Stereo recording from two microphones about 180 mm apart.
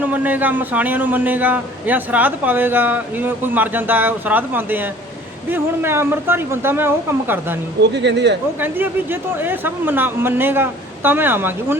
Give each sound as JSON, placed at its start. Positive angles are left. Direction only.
{"t": 0.0, "sound": "a man's voice", "side_deg": -10}
{"t": 7.8, "sound": "speech", "side_deg": -75}
{"t": 8.6, "sound": "a man's voice", "side_deg": -10}